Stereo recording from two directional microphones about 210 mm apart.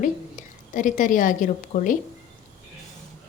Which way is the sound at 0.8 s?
40° left (ahead or behind).